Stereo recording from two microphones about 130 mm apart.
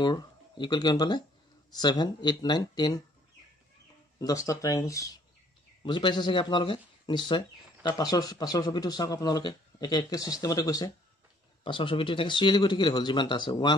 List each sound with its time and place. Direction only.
0.0 s speech: 35° left (ahead or behind)
4.2 s speech: 25° left (ahead or behind)
5.9 s speech: 35° left (ahead or behind)
11.6 s speech: 40° left (ahead or behind)